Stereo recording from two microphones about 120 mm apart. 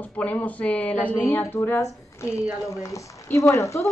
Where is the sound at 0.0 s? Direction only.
15° left (ahead or behind).